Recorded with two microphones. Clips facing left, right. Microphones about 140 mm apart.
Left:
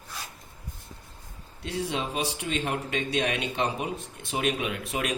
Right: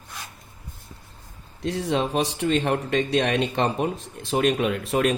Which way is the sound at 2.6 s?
60° right (ahead or behind).